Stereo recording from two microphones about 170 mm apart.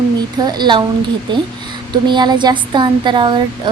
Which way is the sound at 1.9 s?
25° right (ahead or behind).